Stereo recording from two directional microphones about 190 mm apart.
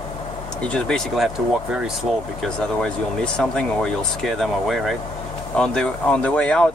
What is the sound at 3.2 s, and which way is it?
Speech, 5° left (ahead or behind).